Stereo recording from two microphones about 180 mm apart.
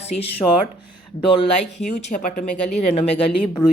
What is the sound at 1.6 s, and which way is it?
A woman's voice, 40° left (ahead or behind).